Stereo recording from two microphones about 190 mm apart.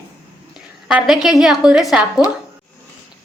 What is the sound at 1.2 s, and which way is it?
Speech, centre (ahead or behind).